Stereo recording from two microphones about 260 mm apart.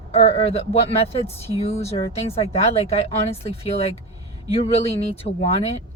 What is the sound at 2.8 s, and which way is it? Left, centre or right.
Speech, left.